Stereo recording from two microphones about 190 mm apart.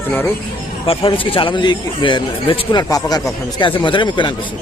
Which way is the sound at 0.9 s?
30° left (ahead or behind).